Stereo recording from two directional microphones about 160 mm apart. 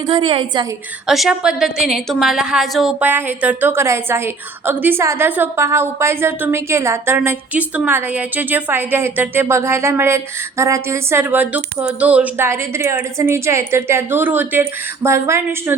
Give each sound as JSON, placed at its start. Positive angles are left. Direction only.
{"t": 0.1, "sound": "a woman's voice", "side_deg": -30}
{"t": 1.0, "sound": "a woman's voice", "side_deg": 0}